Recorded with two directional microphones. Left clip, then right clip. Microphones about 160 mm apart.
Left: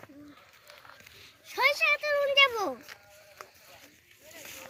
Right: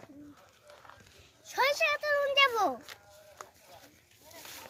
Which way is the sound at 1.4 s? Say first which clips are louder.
Left 3 dB; 25° right (ahead or behind).